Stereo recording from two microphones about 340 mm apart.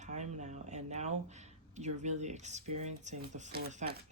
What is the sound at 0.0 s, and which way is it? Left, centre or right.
Speech, centre.